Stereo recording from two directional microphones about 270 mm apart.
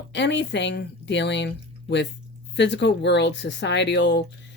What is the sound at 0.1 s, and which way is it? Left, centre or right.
Speech, left.